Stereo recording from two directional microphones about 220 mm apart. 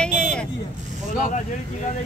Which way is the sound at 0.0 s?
5° left (ahead or behind).